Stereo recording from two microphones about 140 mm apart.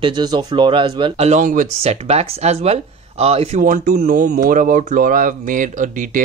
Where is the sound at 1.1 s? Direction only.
55° right (ahead or behind).